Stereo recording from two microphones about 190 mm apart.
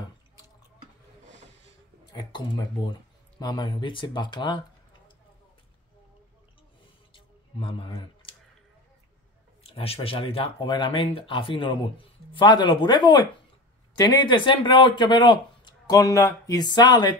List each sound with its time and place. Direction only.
2.1 s speech: 20° left (ahead or behind)
7.2 s a sound: 30° left (ahead or behind)
9.6 s speech: 30° left (ahead or behind)